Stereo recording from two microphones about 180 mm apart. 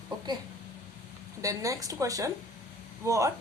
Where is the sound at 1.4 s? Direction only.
20° right (ahead or behind).